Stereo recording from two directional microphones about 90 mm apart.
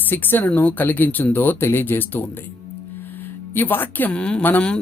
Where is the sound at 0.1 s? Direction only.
20° left (ahead or behind).